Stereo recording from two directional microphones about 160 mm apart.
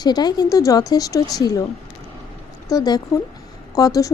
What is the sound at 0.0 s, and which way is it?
A woman's voice, 25° left (ahead or behind).